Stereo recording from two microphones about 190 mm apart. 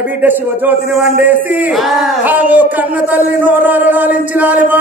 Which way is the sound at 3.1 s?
10° right (ahead or behind).